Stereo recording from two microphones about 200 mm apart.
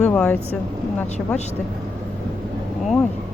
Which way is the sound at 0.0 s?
5° left (ahead or behind).